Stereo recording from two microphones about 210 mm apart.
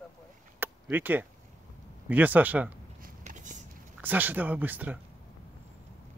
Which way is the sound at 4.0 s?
10° right (ahead or behind).